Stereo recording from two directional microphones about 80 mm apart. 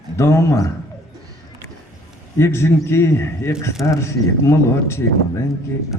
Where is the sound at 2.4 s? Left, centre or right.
Left.